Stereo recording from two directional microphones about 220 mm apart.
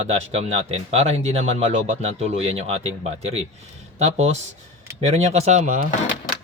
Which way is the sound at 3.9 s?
30° right (ahead or behind).